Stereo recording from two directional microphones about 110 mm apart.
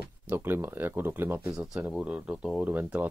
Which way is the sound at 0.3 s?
20° right (ahead or behind).